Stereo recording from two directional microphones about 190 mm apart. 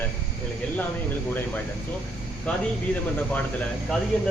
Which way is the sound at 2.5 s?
5° left (ahead or behind).